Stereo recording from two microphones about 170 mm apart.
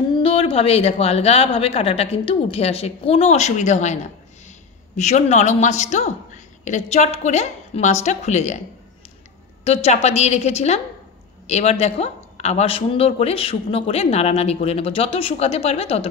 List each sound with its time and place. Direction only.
0.1 s a woman's voice: 35° left (ahead or behind)
9.7 s speech: 40° left (ahead or behind)